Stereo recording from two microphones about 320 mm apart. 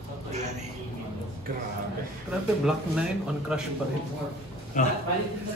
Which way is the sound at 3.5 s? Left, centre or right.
Centre.